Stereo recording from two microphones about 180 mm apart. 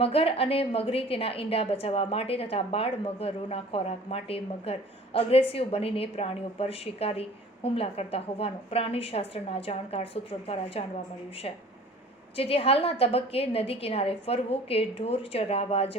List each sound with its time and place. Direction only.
0.0 s a woman's voice: 30° left (ahead or behind)